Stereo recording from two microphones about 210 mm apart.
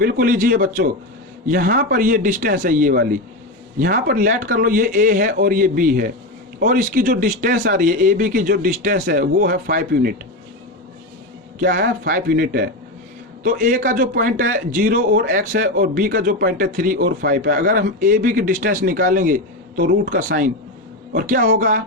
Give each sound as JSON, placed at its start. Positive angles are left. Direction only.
{"t": 0.0, "sound": "speech", "side_deg": -45}
{"t": 11.6, "sound": "speech", "side_deg": -50}